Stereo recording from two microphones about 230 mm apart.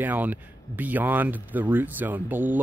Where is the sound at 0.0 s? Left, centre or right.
Centre.